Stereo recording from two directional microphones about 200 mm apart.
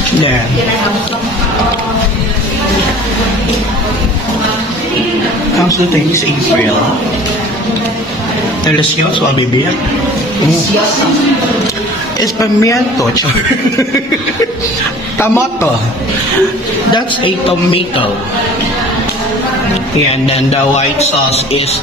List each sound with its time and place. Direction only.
12.4 s a man's voice: 15° left (ahead or behind)
15.1 s a man's voice: 15° left (ahead or behind)
20.7 s a man's voice: 30° left (ahead or behind)